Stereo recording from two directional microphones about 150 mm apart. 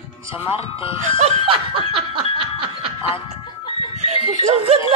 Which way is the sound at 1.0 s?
55° right (ahead or behind).